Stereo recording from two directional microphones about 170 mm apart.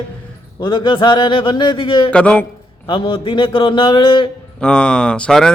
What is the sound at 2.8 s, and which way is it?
A man's voice, 30° left (ahead or behind).